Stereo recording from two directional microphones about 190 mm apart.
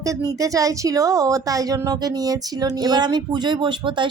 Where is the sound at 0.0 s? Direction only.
15° right (ahead or behind).